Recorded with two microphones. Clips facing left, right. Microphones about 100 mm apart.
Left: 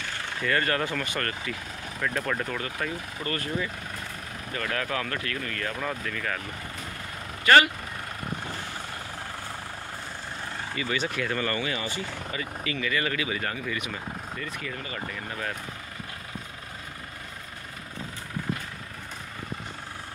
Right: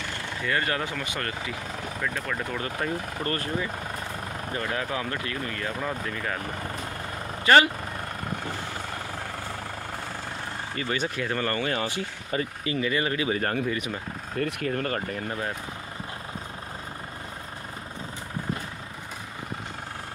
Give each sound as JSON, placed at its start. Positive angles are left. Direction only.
{"t": 0.4, "sound": "speech", "side_deg": -15}
{"t": 2.8, "sound": "speech", "side_deg": -30}
{"t": 4.5, "sound": "speech", "side_deg": -20}
{"t": 7.4, "sound": "speech", "side_deg": -25}
{"t": 10.8, "sound": "speech", "side_deg": -40}
{"t": 12.3, "sound": "speech", "side_deg": -40}
{"t": 12.6, "sound": "speech", "side_deg": -25}
{"t": 14.4, "sound": "speech", "side_deg": -55}